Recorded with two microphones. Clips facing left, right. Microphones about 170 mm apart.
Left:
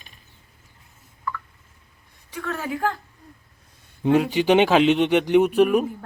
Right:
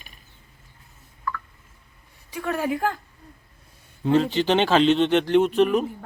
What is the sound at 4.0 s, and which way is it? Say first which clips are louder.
Speech: left 1 dB; 15° left (ahead or behind).